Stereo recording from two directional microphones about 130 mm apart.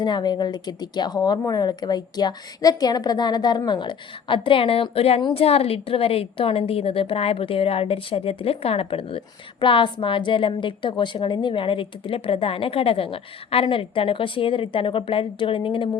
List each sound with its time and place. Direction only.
0.0 s a woman's voice: 35° left (ahead or behind)